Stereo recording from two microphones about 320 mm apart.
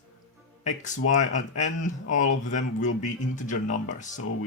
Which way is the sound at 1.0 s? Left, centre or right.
Left.